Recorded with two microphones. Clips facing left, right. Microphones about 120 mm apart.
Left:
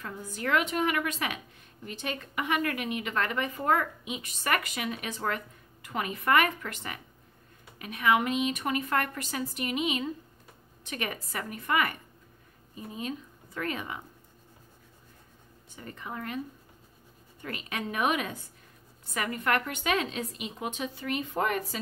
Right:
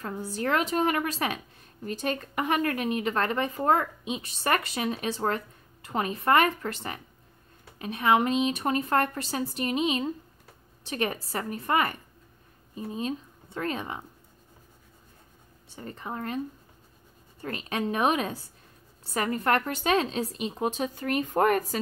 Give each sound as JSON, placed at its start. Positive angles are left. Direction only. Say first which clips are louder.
{"t": 0.0, "sound": "speech", "louder": "right 4 dB", "side_deg": -35}
{"t": 15.7, "sound": "speech", "louder": "right 3 dB", "side_deg": -35}
{"t": 17.4, "sound": "speech", "louder": "right 5 dB", "side_deg": -35}